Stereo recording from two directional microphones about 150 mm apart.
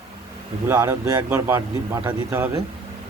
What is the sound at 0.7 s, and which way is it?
Speech, 15° right (ahead or behind).